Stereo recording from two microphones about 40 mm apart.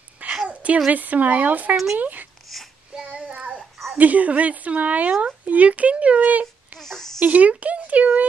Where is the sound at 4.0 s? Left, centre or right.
Right.